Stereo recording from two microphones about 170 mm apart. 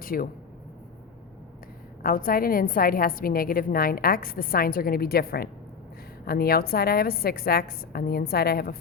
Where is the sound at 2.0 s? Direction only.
55° left (ahead or behind).